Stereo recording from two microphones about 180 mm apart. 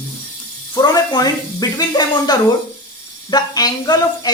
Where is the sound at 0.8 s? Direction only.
25° left (ahead or behind).